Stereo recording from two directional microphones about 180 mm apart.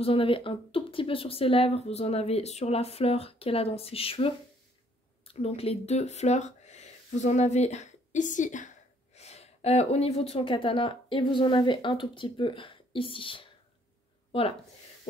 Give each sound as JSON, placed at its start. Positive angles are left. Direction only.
{"t": 0.0, "sound": "speech", "side_deg": 30}